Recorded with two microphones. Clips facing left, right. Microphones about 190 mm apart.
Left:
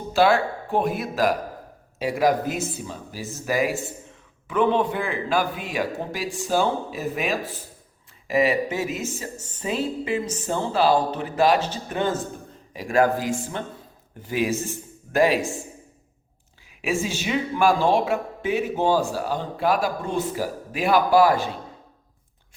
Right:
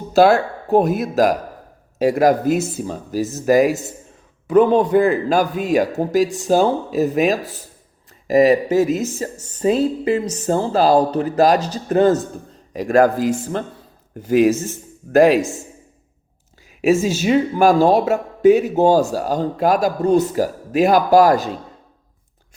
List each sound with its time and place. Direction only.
0.1 s speech: 40° right (ahead or behind)
16.8 s speech: 40° right (ahead or behind)